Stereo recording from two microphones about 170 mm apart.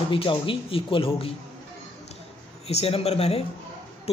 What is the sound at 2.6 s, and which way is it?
Speech, 35° left (ahead or behind).